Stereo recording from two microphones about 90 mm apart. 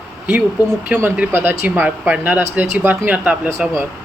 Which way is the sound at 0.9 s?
20° right (ahead or behind).